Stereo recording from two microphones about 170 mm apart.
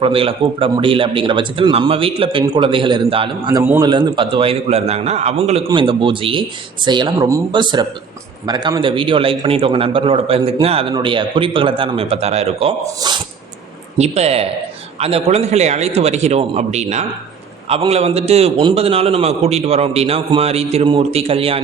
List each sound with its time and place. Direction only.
0.0 s a man's voice: 35° right (ahead or behind)
3.6 s a man's voice: 15° right (ahead or behind); by 12.7 s 35° right (ahead or behind)
13.0 s a man's voice: 25° right (ahead or behind)
14.0 s a man's voice: 40° right (ahead or behind)